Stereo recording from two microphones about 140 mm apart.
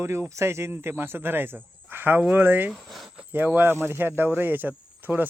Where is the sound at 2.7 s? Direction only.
Centre (ahead or behind).